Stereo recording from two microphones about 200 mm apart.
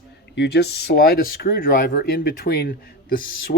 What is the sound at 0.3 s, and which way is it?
Speech, 55° left (ahead or behind).